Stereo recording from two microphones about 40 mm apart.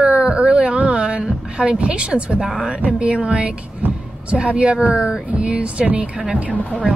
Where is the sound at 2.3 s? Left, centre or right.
Centre.